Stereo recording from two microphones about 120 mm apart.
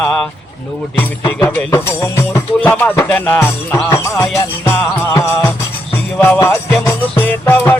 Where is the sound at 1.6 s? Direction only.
20° left (ahead or behind).